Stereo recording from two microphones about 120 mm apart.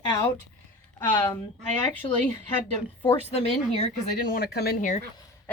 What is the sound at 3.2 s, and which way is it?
Speech, 60° left (ahead or behind).